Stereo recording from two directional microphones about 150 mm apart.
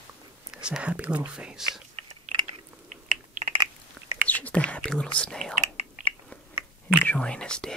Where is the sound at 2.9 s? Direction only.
50° right (ahead or behind).